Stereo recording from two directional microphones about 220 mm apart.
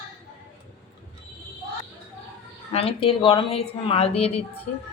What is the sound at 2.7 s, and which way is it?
A woman's voice, 25° left (ahead or behind).